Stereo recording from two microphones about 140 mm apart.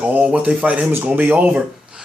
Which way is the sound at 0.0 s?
10° right (ahead or behind).